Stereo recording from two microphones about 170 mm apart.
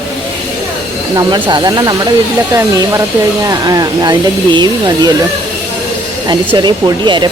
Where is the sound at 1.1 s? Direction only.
25° right (ahead or behind).